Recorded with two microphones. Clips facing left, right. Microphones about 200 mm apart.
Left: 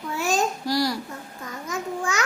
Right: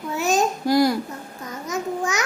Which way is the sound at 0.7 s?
50° right (ahead or behind).